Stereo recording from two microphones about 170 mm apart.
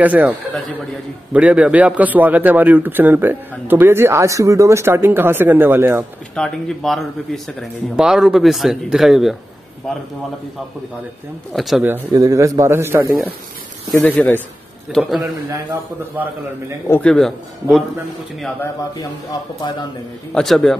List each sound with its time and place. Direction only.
0.0 s a man's voice: 10° right (ahead or behind)
6.3 s speech: 5° left (ahead or behind)
11.5 s speech: centre (ahead or behind)
11.8 s a man's voice: 15° right (ahead or behind)
13.9 s speech: 10° left (ahead or behind)
16.8 s speech: 15° left (ahead or behind)
17.1 s speech: centre (ahead or behind)
20.3 s speech: centre (ahead or behind)